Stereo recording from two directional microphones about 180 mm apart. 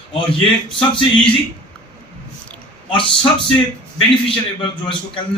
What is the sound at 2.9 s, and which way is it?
Speech, 30° left (ahead or behind).